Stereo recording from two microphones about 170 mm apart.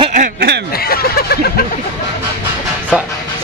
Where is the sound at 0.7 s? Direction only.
65° left (ahead or behind).